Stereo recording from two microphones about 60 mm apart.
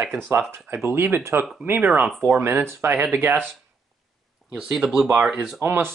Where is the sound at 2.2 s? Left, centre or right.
Right.